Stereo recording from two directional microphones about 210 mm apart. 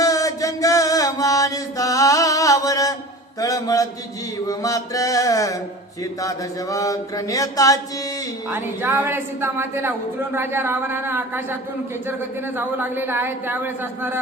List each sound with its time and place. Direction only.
0.0 s mantra: 15° left (ahead or behind)
8.4 s a woman's voice: 10° right (ahead or behind)
12.5 s a woman's voice: 10° right (ahead or behind)